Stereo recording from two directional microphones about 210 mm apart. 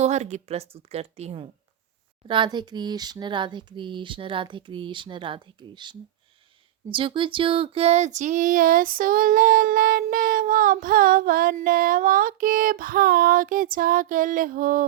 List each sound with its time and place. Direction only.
0.0 s speech: 35° right (ahead or behind)